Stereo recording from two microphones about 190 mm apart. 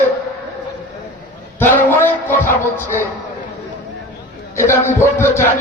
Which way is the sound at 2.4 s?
45° left (ahead or behind).